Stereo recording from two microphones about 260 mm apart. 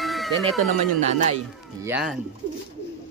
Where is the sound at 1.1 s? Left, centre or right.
Right.